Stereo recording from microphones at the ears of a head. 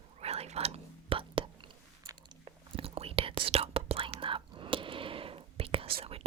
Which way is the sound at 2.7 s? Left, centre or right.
Right.